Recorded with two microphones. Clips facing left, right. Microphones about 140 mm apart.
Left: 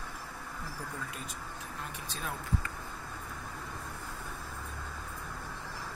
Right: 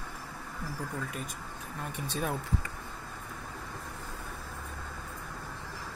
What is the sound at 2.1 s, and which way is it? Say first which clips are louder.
Speech: right 8 dB; 60° right (ahead or behind).